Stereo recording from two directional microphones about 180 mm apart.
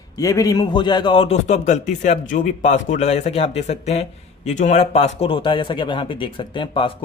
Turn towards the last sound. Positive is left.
turn(degrees=30)  # may be behind; listen again after turning